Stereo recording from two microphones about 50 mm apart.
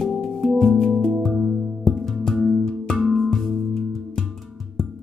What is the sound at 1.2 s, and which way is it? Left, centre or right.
Music, centre.